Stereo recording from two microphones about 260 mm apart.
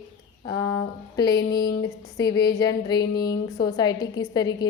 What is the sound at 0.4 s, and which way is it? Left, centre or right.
Speech, centre.